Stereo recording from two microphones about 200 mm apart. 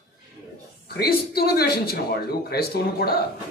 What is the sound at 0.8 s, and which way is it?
A man's voice, 50° left (ahead or behind).